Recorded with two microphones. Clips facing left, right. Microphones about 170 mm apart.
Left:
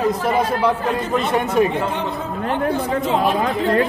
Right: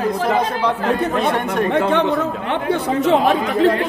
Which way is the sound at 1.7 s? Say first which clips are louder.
Right 6 dB; 75° right (ahead or behind).